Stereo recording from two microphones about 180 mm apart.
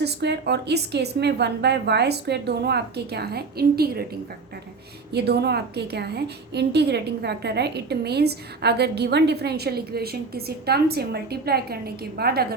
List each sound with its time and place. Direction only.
0.0 s a woman's voice: 65° right (ahead or behind)